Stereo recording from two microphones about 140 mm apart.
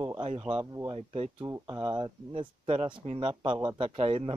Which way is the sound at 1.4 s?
25° right (ahead or behind).